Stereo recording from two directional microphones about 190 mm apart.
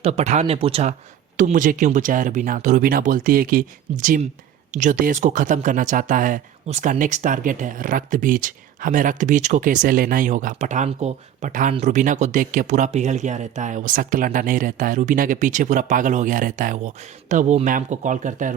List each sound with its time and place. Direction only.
0.0 s speech: 35° right (ahead or behind)
1.4 s speech: 45° right (ahead or behind)